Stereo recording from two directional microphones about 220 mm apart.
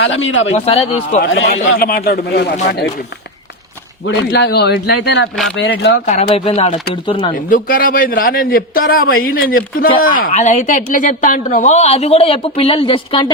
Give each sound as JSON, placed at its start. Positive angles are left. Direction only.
{"t": 0.0, "sound": "speech", "side_deg": 60}
{"t": 0.5, "sound": "speech", "side_deg": 30}
{"t": 1.2, "sound": "speech", "side_deg": 55}
{"t": 1.8, "sound": "speech", "side_deg": 45}
{"t": 4.0, "sound": "speech", "side_deg": 55}
{"t": 6.1, "sound": "speech", "side_deg": 30}
{"t": 7.3, "sound": "speech", "side_deg": 40}